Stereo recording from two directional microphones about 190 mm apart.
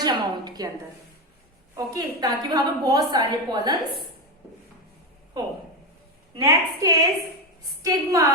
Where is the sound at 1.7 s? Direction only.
20° right (ahead or behind).